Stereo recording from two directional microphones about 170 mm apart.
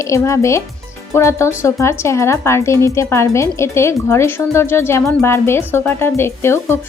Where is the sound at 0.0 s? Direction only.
15° left (ahead or behind).